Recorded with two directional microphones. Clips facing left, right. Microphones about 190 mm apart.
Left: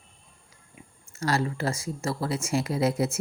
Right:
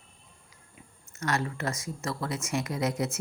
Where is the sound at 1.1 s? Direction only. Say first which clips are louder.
Left 4 dB; 30° left (ahead or behind).